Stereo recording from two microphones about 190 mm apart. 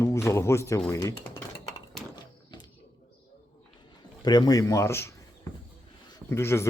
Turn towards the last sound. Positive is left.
turn(degrees=15)  # may be behind; listen again after turning